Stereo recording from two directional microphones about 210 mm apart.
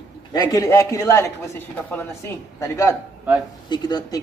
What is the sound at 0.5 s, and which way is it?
A man's voice, 15° left (ahead or behind).